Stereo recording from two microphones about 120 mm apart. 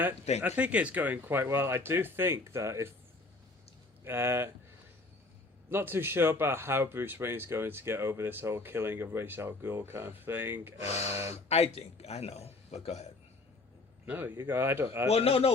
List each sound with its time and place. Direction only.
0.4 s speech: 10° right (ahead or behind)
4.0 s speech: 20° right (ahead or behind)
5.7 s speech: 20° right (ahead or behind)
11.4 s a man's voice: 60° left (ahead or behind)
14.0 s speech: 15° right (ahead or behind)
15.1 s a man's voice: 55° left (ahead or behind)